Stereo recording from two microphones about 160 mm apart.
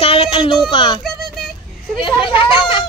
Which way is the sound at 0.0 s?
35° left (ahead or behind).